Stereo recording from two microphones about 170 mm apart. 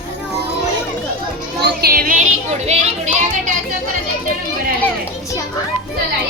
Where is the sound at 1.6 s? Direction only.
65° right (ahead or behind).